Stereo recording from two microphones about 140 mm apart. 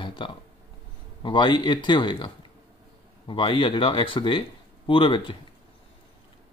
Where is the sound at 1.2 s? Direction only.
35° left (ahead or behind).